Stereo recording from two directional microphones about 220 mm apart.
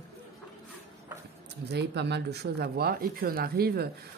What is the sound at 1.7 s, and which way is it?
Speech, 50° right (ahead or behind).